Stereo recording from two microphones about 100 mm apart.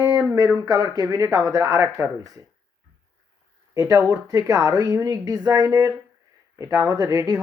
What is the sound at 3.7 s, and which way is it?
Speech, 35° right (ahead or behind).